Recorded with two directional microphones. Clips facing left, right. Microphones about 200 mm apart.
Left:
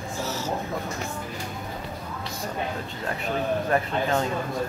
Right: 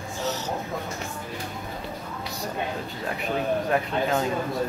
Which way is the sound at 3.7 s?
5° right (ahead or behind).